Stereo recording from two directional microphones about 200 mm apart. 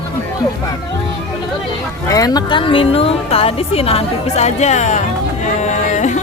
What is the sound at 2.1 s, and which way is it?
A woman's voice, 20° left (ahead or behind).